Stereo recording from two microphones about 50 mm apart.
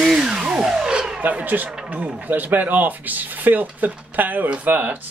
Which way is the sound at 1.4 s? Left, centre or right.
Right.